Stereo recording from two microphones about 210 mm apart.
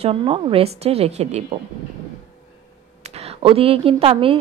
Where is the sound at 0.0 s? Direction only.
25° right (ahead or behind).